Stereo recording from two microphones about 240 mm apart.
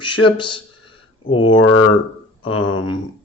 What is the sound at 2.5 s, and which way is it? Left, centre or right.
Speech, left.